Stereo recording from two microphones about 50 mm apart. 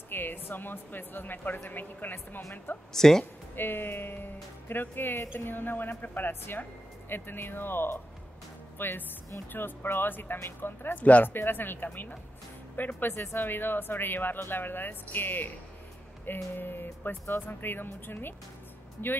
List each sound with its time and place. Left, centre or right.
0.1 s speech: left
2.9 s speech: centre
3.5 s a woman's voice: left
11.0 s speech: left
11.2 s speech: left
13.1 s speech: left
16.5 s speech: left